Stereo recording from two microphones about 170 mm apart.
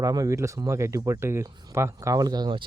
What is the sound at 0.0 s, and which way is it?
Speech, 20° right (ahead or behind).